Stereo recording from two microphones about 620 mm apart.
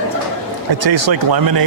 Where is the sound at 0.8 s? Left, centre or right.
Right.